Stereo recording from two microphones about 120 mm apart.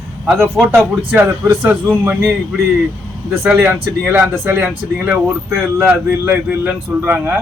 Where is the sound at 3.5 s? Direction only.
15° right (ahead or behind).